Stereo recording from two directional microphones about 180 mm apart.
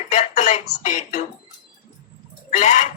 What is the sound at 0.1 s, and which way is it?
Speech, 40° left (ahead or behind).